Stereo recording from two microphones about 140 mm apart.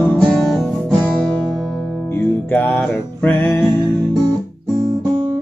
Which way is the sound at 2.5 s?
10° left (ahead or behind).